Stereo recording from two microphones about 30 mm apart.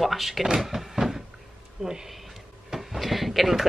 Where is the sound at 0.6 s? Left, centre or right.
Centre.